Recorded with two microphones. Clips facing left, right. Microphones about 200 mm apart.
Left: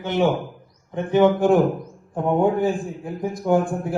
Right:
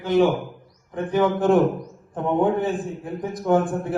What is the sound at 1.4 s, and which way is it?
A man's voice, centre (ahead or behind).